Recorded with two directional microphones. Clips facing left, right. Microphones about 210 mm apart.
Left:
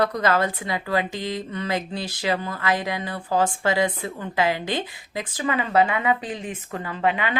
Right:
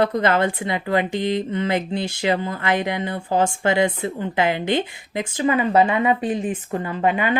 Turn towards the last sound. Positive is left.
turn(degrees=-35)  # may be behind; listen again after turning